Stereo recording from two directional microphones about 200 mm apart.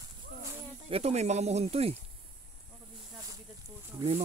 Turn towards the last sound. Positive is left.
turn(degrees=-30)  # may be behind; listen again after turning